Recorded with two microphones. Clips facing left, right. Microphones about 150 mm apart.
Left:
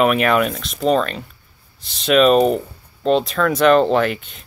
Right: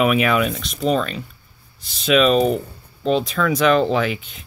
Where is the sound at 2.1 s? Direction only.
40° left (ahead or behind).